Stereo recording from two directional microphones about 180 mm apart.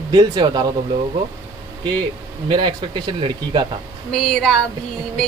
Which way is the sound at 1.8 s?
25° right (ahead or behind).